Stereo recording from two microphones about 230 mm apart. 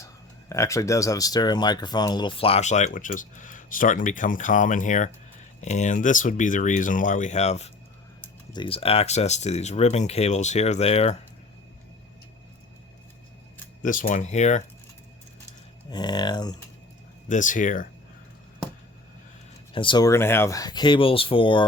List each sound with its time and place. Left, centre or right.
0.0 s speech: centre
13.8 s speech: left
15.9 s speech: centre
17.2 s speech: left
19.7 s speech: left